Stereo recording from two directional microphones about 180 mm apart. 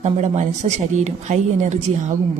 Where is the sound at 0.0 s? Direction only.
40° right (ahead or behind).